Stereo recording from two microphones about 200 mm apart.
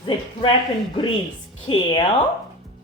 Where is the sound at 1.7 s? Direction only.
25° left (ahead or behind).